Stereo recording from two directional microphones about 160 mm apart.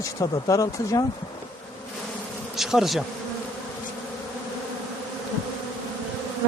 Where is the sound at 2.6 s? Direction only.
Centre (ahead or behind).